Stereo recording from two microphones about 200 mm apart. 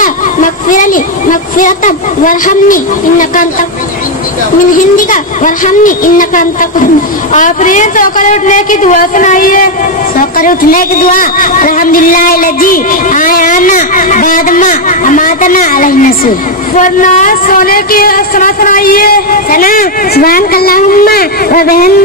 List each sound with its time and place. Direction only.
0.0 s speech: 40° left (ahead or behind)
4.7 s a woman's voice: 40° left (ahead or behind)